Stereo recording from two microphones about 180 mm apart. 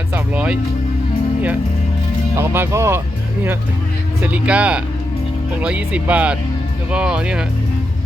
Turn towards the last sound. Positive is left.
turn(degrees=-5)  # may be behind; listen again after turning